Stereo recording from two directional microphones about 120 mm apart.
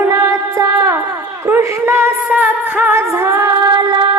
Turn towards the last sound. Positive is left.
turn(degrees=-40)  # may be behind; listen again after turning